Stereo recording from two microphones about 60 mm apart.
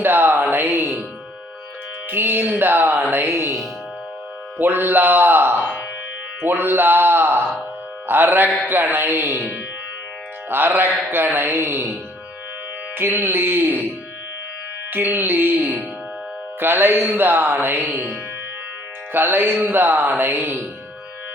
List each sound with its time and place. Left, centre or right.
0.0 s music: right
2.0 s music: right
4.5 s music: right
6.4 s speech: right
8.0 s music: right
10.5 s music: right
13.0 s music: right
14.9 s music: right
19.1 s music: right